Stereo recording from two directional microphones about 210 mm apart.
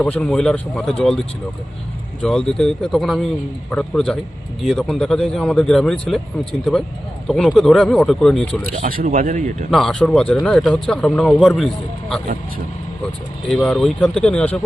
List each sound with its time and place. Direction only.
0.0 s speech: 5° left (ahead or behind)
2.2 s speech: centre (ahead or behind)
8.8 s speech: 40° right (ahead or behind)
9.6 s speech: centre (ahead or behind)
13.5 s speech: centre (ahead or behind)